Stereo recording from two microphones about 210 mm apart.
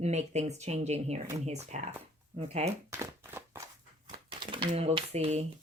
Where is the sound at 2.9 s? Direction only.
15° right (ahead or behind).